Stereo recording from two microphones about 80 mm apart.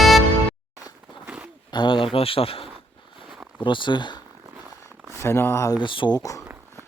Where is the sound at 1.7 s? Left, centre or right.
Left.